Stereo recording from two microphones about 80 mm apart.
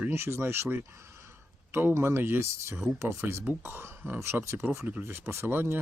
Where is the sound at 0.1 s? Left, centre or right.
Right.